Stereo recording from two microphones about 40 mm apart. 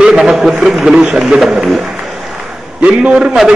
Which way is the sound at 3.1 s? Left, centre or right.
Centre.